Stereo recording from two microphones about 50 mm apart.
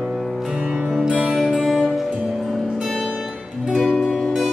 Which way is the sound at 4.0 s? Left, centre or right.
Centre.